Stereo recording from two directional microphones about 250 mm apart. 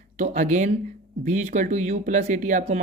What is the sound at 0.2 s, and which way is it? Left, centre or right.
Speech, right.